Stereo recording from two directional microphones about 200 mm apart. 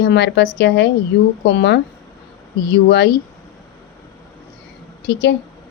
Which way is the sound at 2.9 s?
55° left (ahead or behind).